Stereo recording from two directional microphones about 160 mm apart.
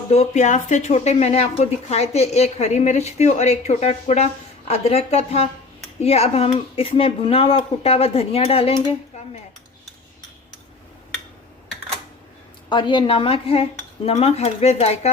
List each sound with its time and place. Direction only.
0.1 s speech: 45° left (ahead or behind)
12.6 s speech: 30° left (ahead or behind)